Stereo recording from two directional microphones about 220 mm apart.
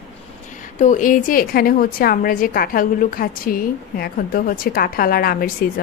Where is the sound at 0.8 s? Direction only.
35° left (ahead or behind).